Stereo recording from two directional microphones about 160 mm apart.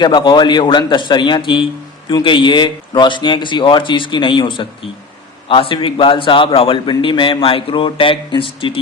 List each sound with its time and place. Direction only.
0.0 s a man's voice: 30° left (ahead or behind)